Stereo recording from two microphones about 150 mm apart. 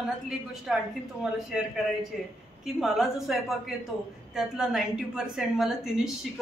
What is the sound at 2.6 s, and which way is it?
A woman's voice, 5° right (ahead or behind).